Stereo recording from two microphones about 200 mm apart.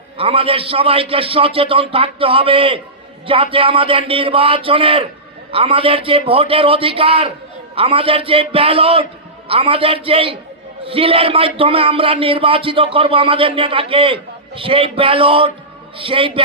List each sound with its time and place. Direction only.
0.2 s a man's voice: 30° right (ahead or behind)